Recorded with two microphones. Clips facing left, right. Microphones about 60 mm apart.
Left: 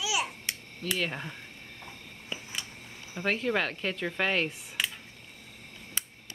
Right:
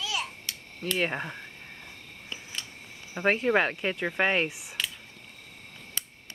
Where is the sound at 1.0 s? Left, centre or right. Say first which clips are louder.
Right 6 dB; right.